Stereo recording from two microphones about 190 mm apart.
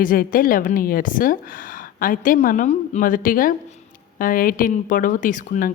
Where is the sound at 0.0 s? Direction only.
50° left (ahead or behind).